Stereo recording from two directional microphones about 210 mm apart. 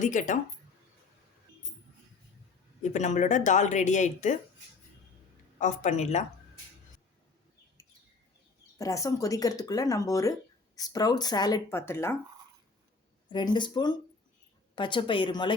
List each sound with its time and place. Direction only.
0.0 s speech: 35° left (ahead or behind)
2.8 s speech: 35° left (ahead or behind)
5.5 s speech: 35° left (ahead or behind)
8.8 s speech: 15° left (ahead or behind)
13.3 s a woman's voice: 20° left (ahead or behind)